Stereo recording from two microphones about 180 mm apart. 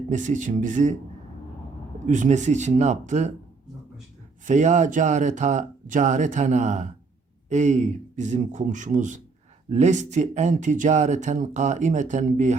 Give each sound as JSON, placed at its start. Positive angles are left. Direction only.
{"t": 0.1, "sound": "a man's voice", "side_deg": -45}
{"t": 2.0, "sound": "speech", "side_deg": -45}
{"t": 4.4, "sound": "a man's voice", "side_deg": -40}